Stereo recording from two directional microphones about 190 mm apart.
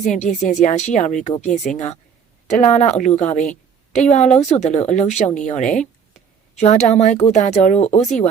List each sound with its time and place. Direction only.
0.0 s speech: 40° left (ahead or behind)